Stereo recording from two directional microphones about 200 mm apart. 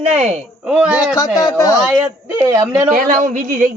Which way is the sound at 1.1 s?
20° left (ahead or behind).